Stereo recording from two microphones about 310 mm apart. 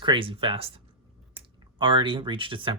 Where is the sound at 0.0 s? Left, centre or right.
Centre.